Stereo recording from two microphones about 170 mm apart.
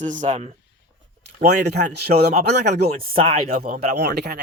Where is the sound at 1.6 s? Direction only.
80° right.